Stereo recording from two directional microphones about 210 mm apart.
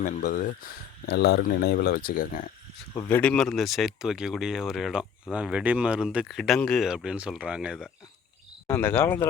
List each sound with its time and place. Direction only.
0.0 s speech: 35° left (ahead or behind)
2.9 s speech: 20° left (ahead or behind)
3.2 s speech: 5° left (ahead or behind)
8.6 s speech: 10° left (ahead or behind)